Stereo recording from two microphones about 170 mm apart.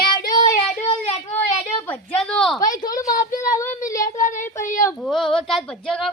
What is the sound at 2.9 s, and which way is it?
Speech, 50° left (ahead or behind).